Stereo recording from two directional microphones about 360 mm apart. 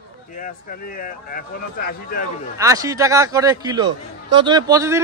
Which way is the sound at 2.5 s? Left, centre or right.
Centre.